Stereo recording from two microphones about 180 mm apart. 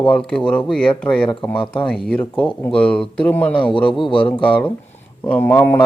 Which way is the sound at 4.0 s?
30° left (ahead or behind).